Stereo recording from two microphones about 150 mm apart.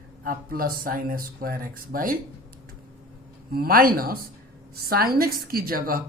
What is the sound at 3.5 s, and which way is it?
Speech, 75° right (ahead or behind).